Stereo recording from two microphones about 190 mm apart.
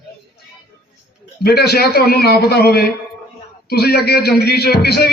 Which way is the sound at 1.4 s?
55° left (ahead or behind).